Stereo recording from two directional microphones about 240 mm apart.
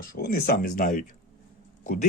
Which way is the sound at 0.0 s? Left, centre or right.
Left.